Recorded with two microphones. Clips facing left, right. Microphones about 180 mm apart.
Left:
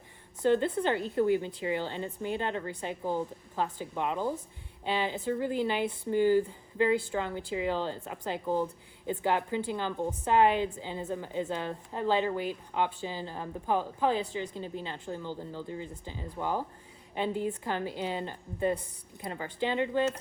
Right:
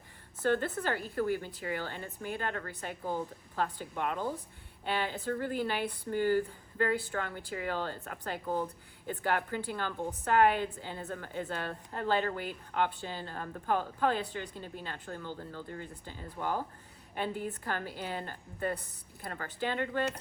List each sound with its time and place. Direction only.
0.4 s a woman's voice: 20° left (ahead or behind)